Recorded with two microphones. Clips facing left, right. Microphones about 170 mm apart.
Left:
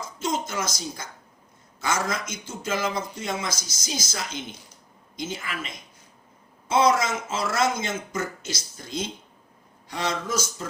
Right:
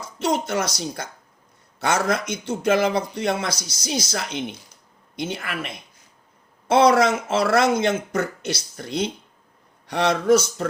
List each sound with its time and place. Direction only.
0.2 s speech: 65° right (ahead or behind)